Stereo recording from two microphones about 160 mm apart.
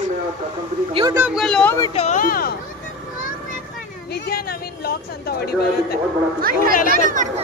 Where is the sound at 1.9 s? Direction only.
40° left (ahead or behind).